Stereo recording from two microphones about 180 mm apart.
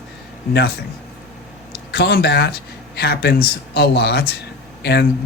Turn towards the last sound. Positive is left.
turn(degrees=65)  # may be behind; listen again after turning